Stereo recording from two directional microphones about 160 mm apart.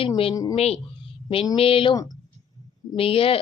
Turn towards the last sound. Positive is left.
turn(degrees=35)  # may be behind; listen again after turning